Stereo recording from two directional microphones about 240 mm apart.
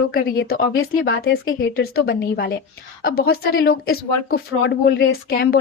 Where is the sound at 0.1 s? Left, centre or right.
Left.